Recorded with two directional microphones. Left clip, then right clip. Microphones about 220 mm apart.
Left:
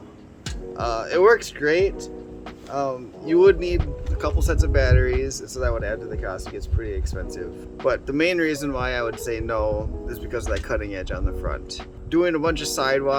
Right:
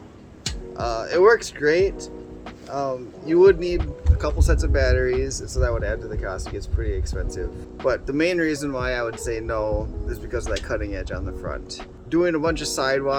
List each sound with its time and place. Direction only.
0.8 s speech: 5° left (ahead or behind)